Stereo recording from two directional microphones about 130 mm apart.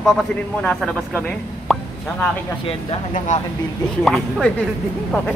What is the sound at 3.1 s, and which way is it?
Speech, 70° left (ahead or behind).